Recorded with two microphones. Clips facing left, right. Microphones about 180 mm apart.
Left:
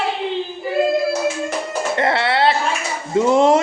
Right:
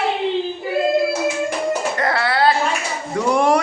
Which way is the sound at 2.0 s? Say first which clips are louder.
Left 2 dB; 25° left (ahead or behind).